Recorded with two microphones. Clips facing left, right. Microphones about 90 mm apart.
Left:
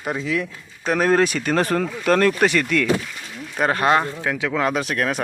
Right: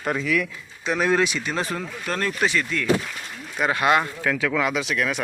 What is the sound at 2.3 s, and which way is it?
Speech, 65° left (ahead or behind).